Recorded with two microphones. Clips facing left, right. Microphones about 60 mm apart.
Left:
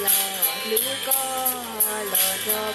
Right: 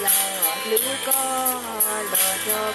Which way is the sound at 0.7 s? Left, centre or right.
Right.